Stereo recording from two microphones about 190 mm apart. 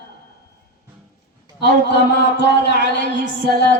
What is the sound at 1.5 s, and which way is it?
Music, 65° left (ahead or behind).